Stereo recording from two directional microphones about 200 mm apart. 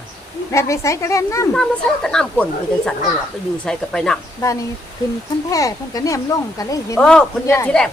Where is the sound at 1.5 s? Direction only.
5° left (ahead or behind).